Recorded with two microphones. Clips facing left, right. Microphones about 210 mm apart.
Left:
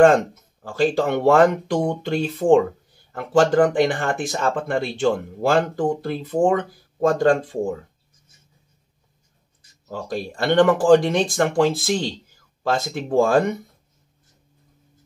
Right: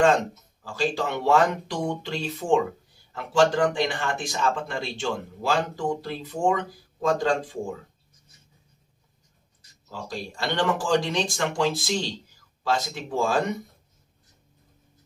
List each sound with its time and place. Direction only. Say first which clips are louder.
0.0 s speech: left 6 dB; 55° left (ahead or behind)
9.8 s speech: left 7 dB; 55° left (ahead or behind)